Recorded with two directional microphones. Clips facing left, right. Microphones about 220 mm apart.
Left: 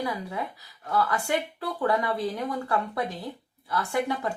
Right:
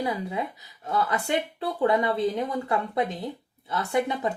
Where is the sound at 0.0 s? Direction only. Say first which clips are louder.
Right 2 dB; 20° right (ahead or behind).